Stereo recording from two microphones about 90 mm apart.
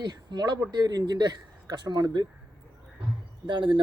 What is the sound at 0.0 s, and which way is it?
Speech, 50° right (ahead or behind).